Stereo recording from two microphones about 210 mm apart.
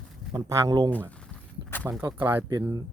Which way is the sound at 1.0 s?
10° left (ahead or behind).